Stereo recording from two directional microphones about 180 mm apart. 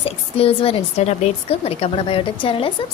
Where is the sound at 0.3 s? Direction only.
35° left (ahead or behind).